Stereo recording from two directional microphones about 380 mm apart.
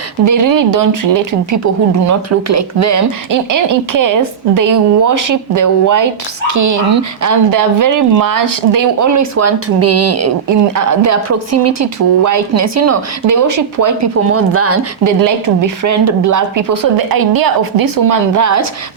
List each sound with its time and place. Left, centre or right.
0.3 s speech: right
2.0 s speech: right
14.3 s speech: right
15.2 s speech: right